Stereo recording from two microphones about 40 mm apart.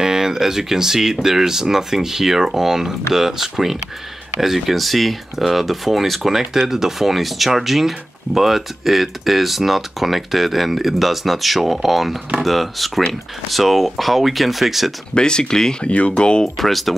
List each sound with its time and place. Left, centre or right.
0.0 s speech: centre
15.1 s speech: left
16.5 s speech: centre